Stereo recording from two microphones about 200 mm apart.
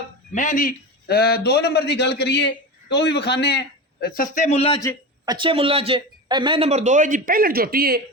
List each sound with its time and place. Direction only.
0.3 s a man's voice: 40° left (ahead or behind)
5.2 s a man's voice: 20° right (ahead or behind); by 8.0 s 50° right (ahead or behind)